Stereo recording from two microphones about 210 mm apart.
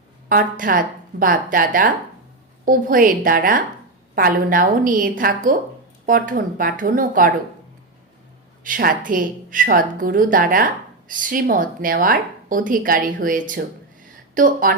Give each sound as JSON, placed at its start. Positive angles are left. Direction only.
{"t": 0.3, "sound": "a woman's voice", "side_deg": -40}
{"t": 8.6, "sound": "a woman's voice", "side_deg": -40}